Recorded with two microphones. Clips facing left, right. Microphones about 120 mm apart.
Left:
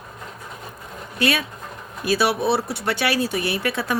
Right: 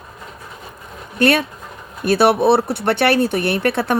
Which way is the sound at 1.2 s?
55° right (ahead or behind).